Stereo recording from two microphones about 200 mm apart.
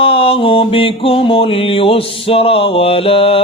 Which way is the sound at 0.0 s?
30° left (ahead or behind).